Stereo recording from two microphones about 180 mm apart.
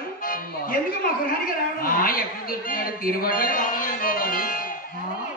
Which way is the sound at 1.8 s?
50° left (ahead or behind).